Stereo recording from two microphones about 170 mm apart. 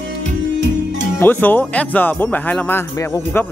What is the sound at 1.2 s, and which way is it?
Speech, 10° left (ahead or behind).